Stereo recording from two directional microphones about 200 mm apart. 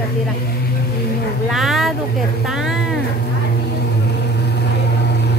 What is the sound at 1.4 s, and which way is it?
A woman's voice, centre (ahead or behind).